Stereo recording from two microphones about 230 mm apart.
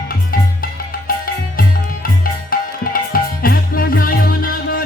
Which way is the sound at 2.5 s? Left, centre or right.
Left.